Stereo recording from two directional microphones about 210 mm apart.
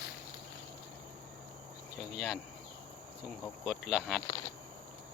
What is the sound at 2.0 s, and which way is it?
Speech, centre (ahead or behind).